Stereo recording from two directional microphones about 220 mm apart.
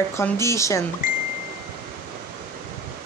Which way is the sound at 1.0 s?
35° left (ahead or behind).